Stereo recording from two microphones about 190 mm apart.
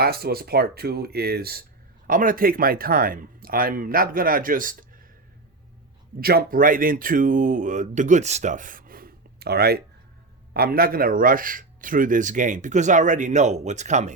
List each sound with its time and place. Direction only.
0.0 s speech: 55° right (ahead or behind)
6.1 s speech: 50° right (ahead or behind)